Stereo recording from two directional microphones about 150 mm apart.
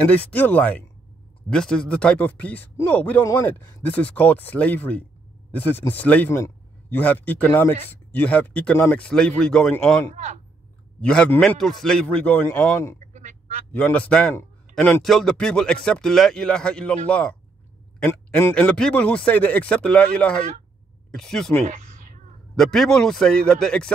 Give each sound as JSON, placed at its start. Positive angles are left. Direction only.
{"t": 0.0, "sound": "a man's voice", "side_deg": 10}
{"t": 10.1, "sound": "speech", "side_deg": -50}
{"t": 11.1, "sound": "a man's voice", "side_deg": 10}
{"t": 13.0, "sound": "honk", "side_deg": -50}
{"t": 13.7, "sound": "a man's voice", "side_deg": 10}
{"t": 22.6, "sound": "speech", "side_deg": 5}